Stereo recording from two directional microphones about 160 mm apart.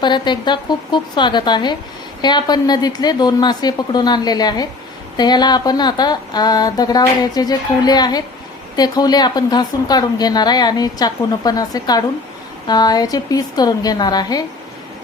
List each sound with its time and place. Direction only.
0.0 s a woman's voice: 30° left (ahead or behind)